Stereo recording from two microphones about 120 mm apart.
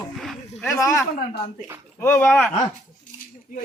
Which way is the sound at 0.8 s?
25° left (ahead or behind).